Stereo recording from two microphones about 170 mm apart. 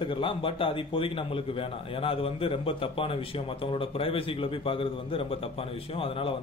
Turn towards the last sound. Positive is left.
turn(degrees=35)  # may be behind; listen again after turning